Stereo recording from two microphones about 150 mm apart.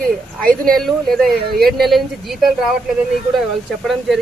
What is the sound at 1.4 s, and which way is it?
Speech, 90° right.